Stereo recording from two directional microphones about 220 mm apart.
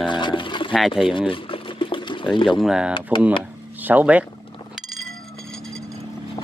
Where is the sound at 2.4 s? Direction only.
Centre (ahead or behind).